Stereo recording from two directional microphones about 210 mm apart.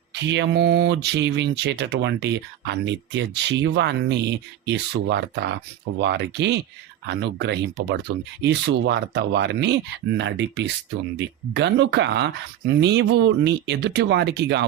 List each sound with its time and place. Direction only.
0.1 s speech: 55° right (ahead or behind)